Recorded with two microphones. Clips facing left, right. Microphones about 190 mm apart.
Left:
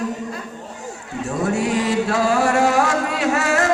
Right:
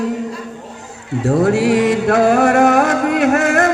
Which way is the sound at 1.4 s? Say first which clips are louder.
Right 6 dB; 65° right (ahead or behind).